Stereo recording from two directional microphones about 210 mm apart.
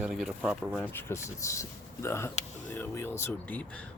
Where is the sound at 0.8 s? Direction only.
10° left (ahead or behind).